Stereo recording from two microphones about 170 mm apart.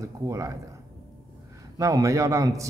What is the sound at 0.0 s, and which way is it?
Speech, 20° right (ahead or behind).